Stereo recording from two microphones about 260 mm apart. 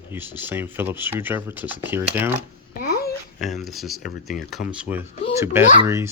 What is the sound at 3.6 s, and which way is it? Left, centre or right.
Speech, centre.